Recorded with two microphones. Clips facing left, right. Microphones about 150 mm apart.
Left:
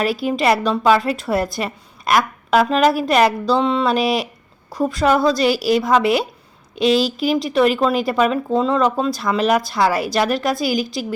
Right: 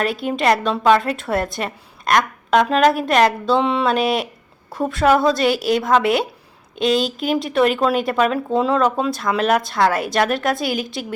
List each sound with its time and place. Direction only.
0.0 s a woman's voice: 5° left (ahead or behind)